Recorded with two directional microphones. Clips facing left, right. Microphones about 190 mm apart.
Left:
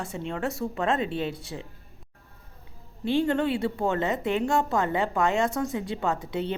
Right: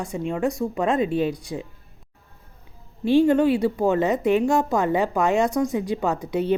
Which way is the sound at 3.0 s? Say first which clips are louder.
Right 7 dB; 20° left (ahead or behind).